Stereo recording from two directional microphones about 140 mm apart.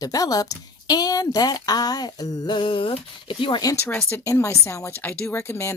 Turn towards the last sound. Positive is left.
turn(degrees=20)  # may be behind; listen again after turning